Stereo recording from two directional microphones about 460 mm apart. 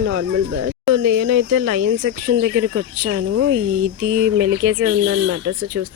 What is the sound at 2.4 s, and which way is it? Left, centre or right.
Speech, right.